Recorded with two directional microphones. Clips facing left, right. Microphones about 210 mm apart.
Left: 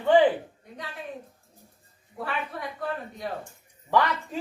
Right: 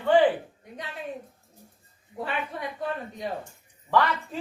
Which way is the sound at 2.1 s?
20° right (ahead or behind).